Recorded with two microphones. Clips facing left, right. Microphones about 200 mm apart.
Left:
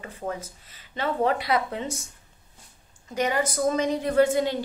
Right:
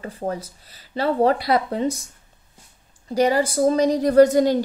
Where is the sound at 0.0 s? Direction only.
35° right (ahead or behind).